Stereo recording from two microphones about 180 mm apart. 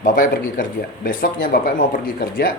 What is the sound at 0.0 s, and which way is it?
A man's voice, 50° left (ahead or behind).